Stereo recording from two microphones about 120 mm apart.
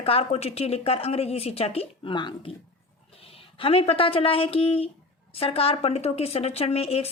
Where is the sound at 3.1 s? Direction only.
55° left (ahead or behind).